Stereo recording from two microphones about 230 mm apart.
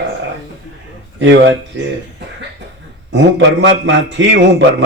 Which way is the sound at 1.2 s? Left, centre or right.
Right.